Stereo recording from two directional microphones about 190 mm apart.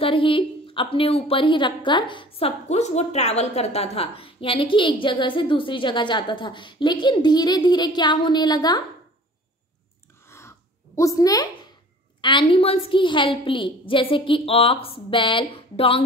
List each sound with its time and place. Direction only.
0.0 s a woman's voice: 25° left (ahead or behind)
10.2 s a sound: 15° left (ahead or behind)
11.0 s a woman's voice: 20° left (ahead or behind)